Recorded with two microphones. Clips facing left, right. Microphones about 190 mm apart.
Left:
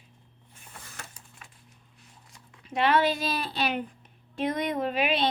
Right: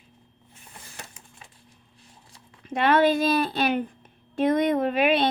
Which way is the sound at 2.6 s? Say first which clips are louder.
Right 4 dB; 50° right (ahead or behind).